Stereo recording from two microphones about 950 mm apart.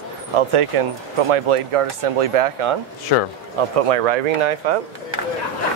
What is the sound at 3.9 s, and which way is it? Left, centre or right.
Speech, right.